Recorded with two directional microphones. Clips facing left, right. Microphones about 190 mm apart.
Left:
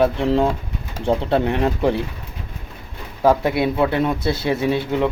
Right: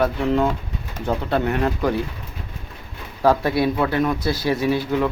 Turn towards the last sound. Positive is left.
turn(degrees=25)  # may be behind; listen again after turning